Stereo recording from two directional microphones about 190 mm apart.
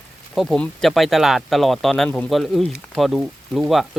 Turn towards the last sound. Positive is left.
turn(degrees=0)  # may be behind; listen again after turning